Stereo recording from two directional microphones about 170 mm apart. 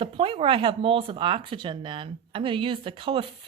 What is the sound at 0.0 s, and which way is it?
Speech, 30° right (ahead or behind).